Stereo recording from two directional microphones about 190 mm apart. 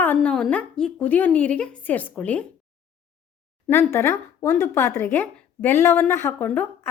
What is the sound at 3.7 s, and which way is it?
A woman's voice, 10° left (ahead or behind).